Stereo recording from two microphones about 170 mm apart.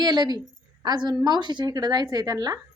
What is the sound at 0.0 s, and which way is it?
A woman's voice, 25° right (ahead or behind).